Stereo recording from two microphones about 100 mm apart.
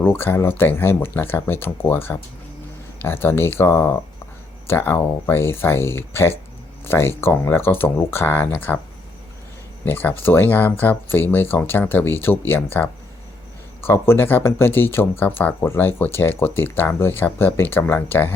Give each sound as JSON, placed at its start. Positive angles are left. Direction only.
{"t": 0.0, "sound": "speech", "side_deg": 20}
{"t": 9.8, "sound": "speech", "side_deg": 20}